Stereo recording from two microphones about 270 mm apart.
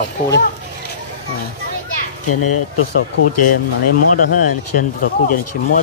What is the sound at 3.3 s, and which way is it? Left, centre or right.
Speech, left.